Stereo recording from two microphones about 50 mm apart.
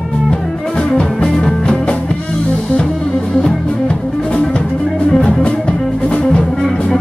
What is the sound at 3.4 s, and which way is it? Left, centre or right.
Music, left.